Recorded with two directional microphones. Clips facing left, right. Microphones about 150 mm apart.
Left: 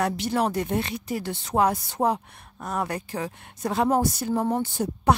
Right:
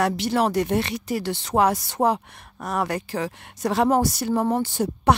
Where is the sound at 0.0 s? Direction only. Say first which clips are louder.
Right 3 dB; 90° right.